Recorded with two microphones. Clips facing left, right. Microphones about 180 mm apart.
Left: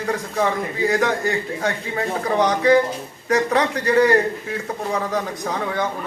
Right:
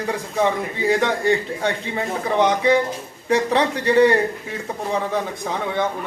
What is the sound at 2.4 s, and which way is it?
Speech, 25° right (ahead or behind).